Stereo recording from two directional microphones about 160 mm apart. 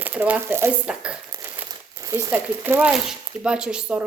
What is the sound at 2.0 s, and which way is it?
Speech, 20° right (ahead or behind).